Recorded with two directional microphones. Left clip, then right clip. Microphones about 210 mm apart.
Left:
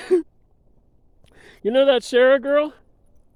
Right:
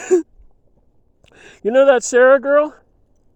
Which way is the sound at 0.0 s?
10° right (ahead or behind).